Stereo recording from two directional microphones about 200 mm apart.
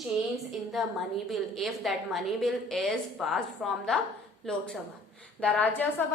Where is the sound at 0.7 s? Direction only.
Centre (ahead or behind).